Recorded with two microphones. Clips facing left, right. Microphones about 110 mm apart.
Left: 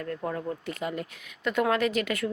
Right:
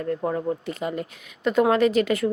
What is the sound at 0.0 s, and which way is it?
Speech, 25° right (ahead or behind).